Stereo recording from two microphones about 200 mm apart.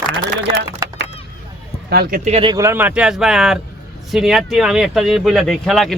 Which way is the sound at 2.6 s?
10° right (ahead or behind).